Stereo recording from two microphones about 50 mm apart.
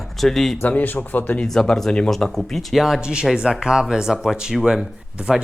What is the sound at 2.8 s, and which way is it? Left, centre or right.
Speech, centre.